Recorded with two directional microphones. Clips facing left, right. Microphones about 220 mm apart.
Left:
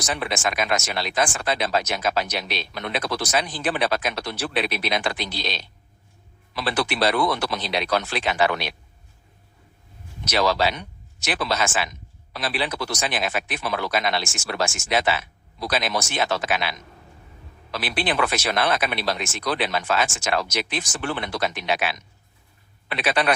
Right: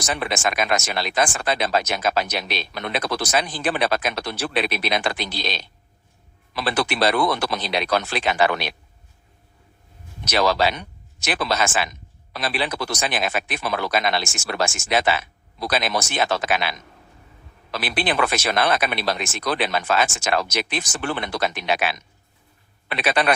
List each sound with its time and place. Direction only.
0.0 s speech: 50° right (ahead or behind)
6.6 s speech: 50° right (ahead or behind)
10.2 s speech: 50° right (ahead or behind)